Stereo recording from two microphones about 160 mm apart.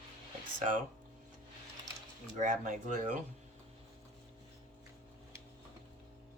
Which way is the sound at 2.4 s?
50° right (ahead or behind).